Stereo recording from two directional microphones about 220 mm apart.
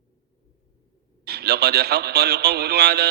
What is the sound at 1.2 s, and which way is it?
A man's voice, 45° right (ahead or behind).